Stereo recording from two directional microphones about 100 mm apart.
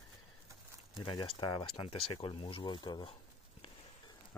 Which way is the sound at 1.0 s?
55° left (ahead or behind).